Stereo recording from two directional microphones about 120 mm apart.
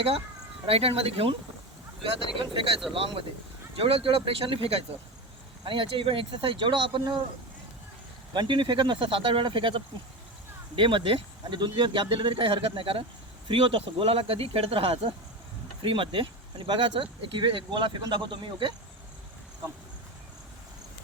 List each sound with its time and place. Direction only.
0.7 s speech: 55° right (ahead or behind)
5.6 s speech: 45° right (ahead or behind)
8.3 s speech: 40° right (ahead or behind)